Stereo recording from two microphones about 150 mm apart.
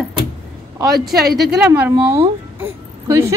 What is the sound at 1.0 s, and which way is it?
Speech, centre (ahead or behind).